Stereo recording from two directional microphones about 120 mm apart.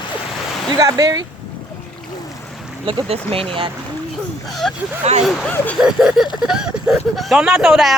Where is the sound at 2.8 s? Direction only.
50° right (ahead or behind).